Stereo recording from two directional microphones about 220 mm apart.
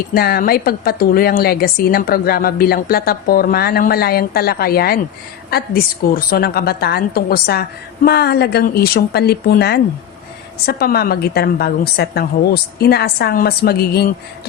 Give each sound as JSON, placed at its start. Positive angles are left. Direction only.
{"t": 0.1, "sound": "a woman's voice", "side_deg": 45}